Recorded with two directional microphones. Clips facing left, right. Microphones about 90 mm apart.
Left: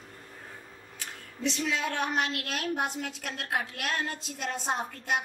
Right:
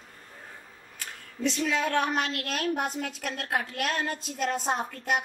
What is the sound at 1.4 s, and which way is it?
A woman's voice, 45° right (ahead or behind).